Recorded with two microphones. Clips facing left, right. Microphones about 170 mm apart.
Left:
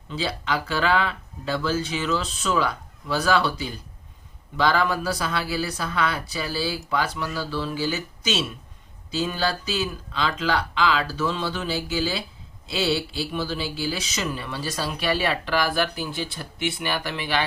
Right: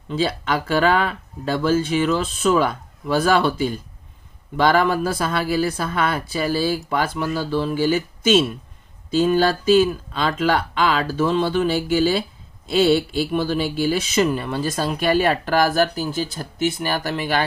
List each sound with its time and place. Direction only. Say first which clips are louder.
0.1 s speech: right 5 dB; 50° right (ahead or behind)